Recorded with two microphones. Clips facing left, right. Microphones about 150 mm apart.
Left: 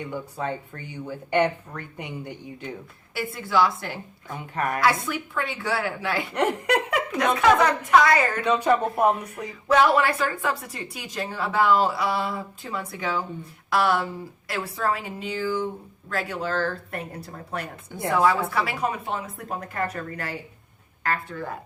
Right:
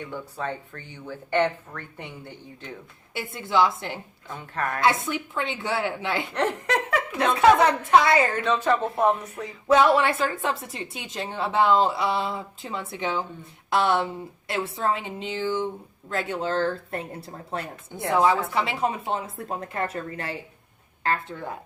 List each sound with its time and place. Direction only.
0.0 s speech: 10° left (ahead or behind)
3.3 s speech: 20° right (ahead or behind)
4.3 s speech: 15° left (ahead or behind)
5.0 s speech: 25° right (ahead or behind)
6.3 s speech: 10° left (ahead or behind)
7.2 s speech: 30° right (ahead or behind)
8.4 s speech: 15° left (ahead or behind)
9.6 s speech: 25° right (ahead or behind)